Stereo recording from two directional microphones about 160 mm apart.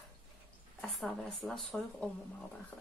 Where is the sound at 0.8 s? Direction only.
Centre (ahead or behind).